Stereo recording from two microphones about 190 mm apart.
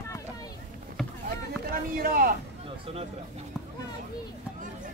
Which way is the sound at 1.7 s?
50° right (ahead or behind).